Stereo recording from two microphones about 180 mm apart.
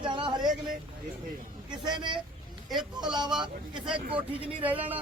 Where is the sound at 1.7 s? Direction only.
25° right (ahead or behind).